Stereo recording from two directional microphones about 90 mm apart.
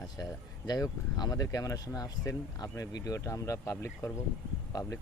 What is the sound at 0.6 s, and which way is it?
Speech, 45° left (ahead or behind).